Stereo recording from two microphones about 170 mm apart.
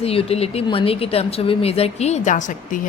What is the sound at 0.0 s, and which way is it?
A woman's voice, 35° left (ahead or behind).